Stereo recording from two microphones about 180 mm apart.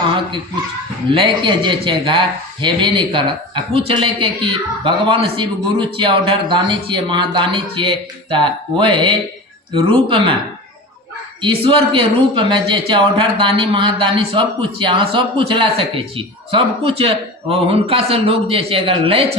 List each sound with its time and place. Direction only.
1.1 s a man's voice: 30° right (ahead or behind)
11.3 s a man's voice: 30° right (ahead or behind)